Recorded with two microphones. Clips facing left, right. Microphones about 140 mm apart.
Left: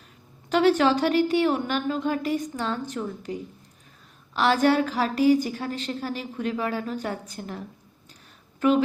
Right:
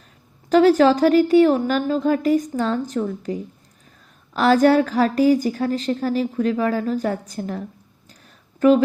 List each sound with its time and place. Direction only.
0.5 s a woman's voice: 40° right (ahead or behind)
4.4 s a woman's voice: 40° right (ahead or behind)